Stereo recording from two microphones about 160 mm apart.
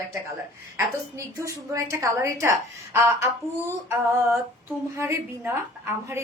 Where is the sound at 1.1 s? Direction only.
20° right (ahead or behind).